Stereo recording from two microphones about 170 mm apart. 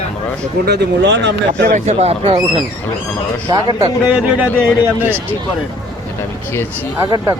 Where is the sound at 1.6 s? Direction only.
45° right (ahead or behind).